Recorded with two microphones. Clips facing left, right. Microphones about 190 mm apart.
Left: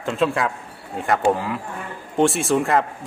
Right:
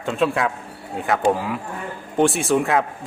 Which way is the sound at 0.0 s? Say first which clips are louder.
Even; centre (ahead or behind).